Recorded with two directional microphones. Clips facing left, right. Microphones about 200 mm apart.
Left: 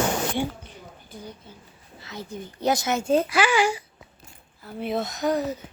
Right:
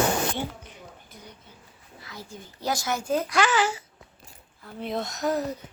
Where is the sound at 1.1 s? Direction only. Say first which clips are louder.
Left 10 dB; 30° left (ahead or behind).